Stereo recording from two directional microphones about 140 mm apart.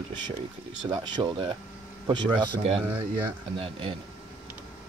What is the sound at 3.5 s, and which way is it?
Speech, 40° right (ahead or behind).